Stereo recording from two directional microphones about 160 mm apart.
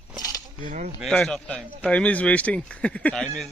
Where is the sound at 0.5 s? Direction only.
50° right (ahead or behind).